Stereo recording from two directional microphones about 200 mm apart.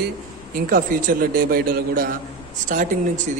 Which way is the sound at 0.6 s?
45° right (ahead or behind).